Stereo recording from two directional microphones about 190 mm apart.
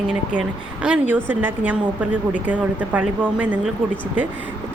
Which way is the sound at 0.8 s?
5° right (ahead or behind).